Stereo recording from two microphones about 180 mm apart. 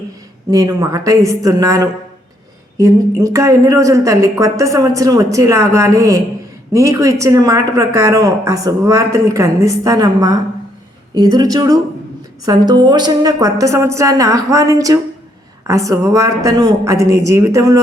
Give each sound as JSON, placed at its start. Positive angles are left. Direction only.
{"t": 0.5, "sound": "a woman's voice", "side_deg": -20}